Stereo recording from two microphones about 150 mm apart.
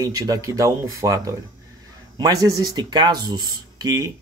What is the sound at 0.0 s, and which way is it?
Speech, 25° right (ahead or behind).